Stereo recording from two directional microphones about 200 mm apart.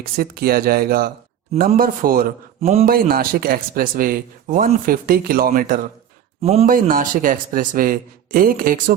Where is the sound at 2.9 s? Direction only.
45° right (ahead or behind).